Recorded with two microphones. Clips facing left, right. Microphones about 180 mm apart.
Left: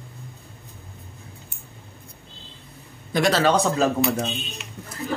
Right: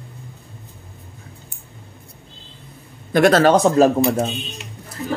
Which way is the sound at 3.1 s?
50° right (ahead or behind).